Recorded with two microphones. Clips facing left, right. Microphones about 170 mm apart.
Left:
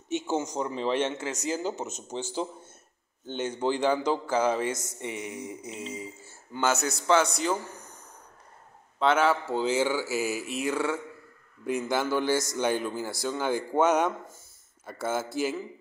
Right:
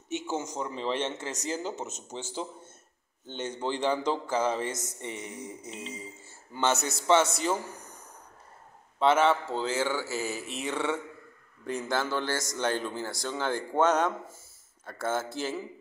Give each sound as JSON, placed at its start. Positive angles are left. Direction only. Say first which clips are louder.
{"t": 0.3, "sound": "speech", "louder": "left 4 dB", "side_deg": 20}
{"t": 1.0, "sound": "a man's voice", "louder": "left 3 dB", "side_deg": 5}
{"t": 9.0, "sound": "speech", "louder": "even", "side_deg": 0}